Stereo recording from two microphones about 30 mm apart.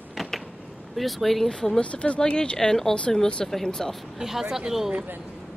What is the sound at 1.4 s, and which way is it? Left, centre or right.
Speech, left.